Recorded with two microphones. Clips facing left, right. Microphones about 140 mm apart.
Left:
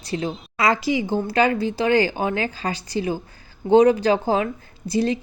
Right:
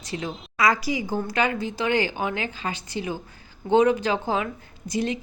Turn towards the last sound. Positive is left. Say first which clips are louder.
# left 5 dB
turn(degrees=35)  # may be behind; listen again after turning